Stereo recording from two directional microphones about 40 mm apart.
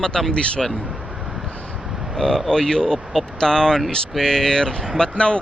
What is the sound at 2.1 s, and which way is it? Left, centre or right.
Speech, centre.